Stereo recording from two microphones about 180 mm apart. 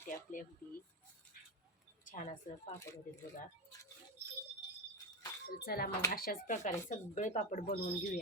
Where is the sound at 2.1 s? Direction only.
40° left (ahead or behind).